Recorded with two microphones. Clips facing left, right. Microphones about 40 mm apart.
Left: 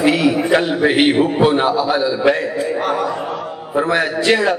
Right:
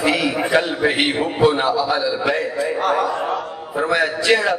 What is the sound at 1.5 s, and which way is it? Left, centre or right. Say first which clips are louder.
Speech: left 3 dB; centre.